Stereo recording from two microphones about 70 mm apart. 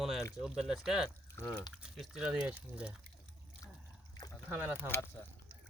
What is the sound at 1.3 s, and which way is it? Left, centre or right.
Speech, left.